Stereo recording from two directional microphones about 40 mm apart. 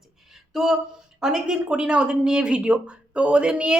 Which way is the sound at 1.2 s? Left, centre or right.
Centre.